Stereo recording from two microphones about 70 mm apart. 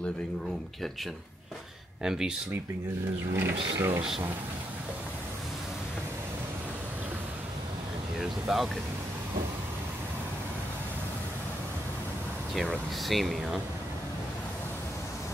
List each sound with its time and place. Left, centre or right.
2.0 s speech: centre
3.3 s speech: right
8.2 s speech: centre
12.5 s speech: centre